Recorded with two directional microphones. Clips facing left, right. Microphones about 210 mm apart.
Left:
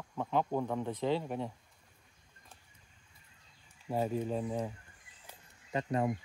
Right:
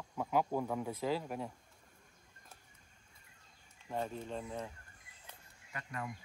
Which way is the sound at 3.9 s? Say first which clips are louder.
Left 7 dB; 10° left (ahead or behind).